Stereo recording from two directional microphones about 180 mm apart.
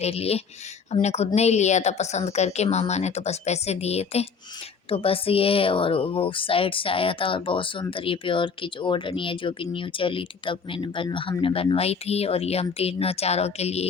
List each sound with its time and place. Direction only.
0.0 s a woman's voice: 35° left (ahead or behind)